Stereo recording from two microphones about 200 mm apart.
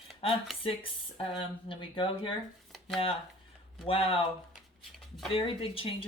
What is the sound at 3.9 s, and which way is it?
Speech, 30° left (ahead or behind).